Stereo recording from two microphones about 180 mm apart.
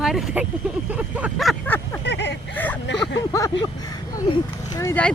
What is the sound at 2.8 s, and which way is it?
Speech, 75° left (ahead or behind).